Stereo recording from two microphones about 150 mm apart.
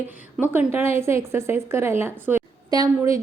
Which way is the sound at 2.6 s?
25° right (ahead or behind).